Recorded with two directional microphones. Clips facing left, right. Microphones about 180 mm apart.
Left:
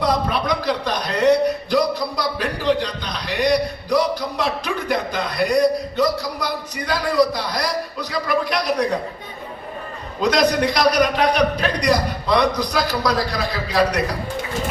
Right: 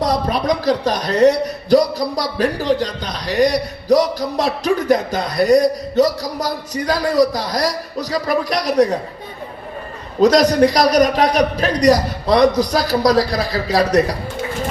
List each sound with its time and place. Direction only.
0.0 s a man's voice: 40° right (ahead or behind)
10.2 s a man's voice: 40° right (ahead or behind)